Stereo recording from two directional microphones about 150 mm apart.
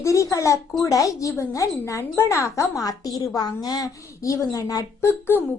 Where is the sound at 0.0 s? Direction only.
20° left (ahead or behind).